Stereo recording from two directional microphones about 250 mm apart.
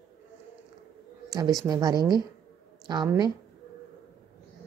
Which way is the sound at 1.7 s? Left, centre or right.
Centre.